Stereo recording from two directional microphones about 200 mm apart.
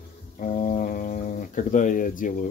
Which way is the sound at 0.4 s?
40° left (ahead or behind).